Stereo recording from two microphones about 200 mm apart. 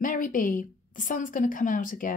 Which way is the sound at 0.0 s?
40° left (ahead or behind).